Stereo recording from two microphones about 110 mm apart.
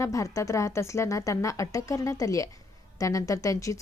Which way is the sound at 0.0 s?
30° left (ahead or behind).